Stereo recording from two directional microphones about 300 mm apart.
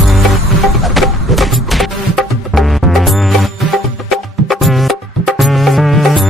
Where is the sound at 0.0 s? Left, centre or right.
Centre.